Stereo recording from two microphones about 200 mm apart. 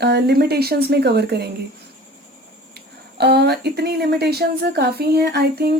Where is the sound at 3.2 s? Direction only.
55° right (ahead or behind).